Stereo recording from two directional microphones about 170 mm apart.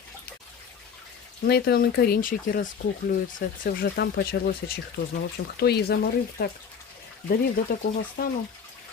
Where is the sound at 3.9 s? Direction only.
75° left (ahead or behind).